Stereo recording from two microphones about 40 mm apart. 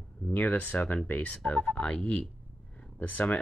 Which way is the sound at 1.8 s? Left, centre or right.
Left.